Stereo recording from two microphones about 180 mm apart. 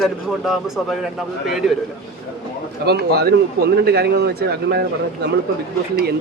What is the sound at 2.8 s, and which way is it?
Speech, 65° right (ahead or behind).